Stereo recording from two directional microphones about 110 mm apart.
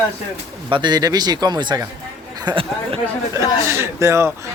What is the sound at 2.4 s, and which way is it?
Speech, 55° right (ahead or behind).